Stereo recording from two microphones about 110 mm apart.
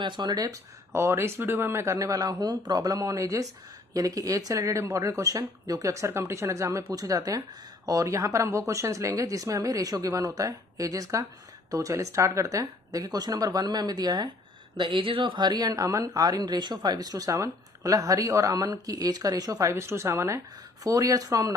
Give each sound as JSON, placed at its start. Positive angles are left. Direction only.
{"t": 0.0, "sound": "speech", "side_deg": -45}
{"t": 0.9, "sound": "speech", "side_deg": -25}
{"t": 14.8, "sound": "speech", "side_deg": -55}
{"t": 19.7, "sound": "speech", "side_deg": -25}